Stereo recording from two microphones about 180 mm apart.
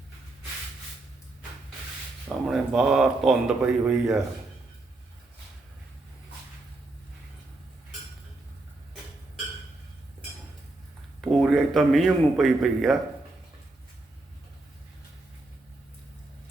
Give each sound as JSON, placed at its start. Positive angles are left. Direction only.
{"t": 2.5, "sound": "speech", "side_deg": -5}
{"t": 11.2, "sound": "speech", "side_deg": 0}